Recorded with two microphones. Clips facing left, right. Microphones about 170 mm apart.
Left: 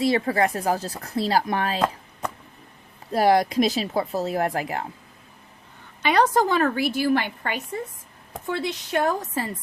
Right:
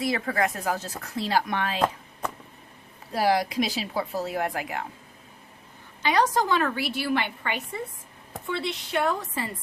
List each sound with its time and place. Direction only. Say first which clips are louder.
0.0 s speech: left 5 dB; 30° left (ahead or behind)
3.1 s speech: left 5 dB; 45° left (ahead or behind)
6.0 s a woman's voice: left 3 dB; 60° left (ahead or behind); by 9.5 s 40° left (ahead or behind)